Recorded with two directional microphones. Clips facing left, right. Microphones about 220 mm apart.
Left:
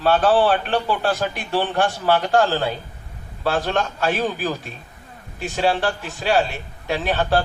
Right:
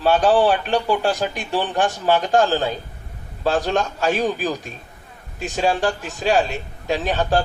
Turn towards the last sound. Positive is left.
turn(degrees=-15)  # may be behind; listen again after turning